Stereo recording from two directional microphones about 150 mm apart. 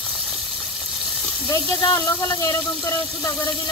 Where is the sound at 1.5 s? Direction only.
25° left (ahead or behind).